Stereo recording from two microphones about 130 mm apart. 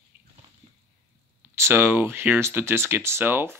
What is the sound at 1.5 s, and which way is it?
Speech, 20° right (ahead or behind).